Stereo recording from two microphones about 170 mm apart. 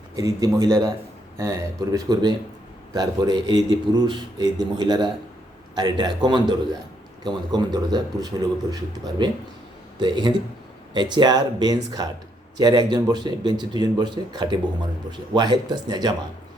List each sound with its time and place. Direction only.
0.2 s speech: 20° right (ahead or behind)